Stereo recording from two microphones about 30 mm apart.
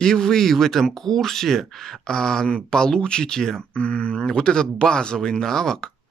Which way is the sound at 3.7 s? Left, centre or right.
Left.